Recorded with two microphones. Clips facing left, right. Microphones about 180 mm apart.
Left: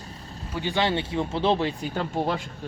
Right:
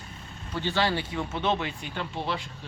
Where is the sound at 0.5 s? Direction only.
15° left (ahead or behind).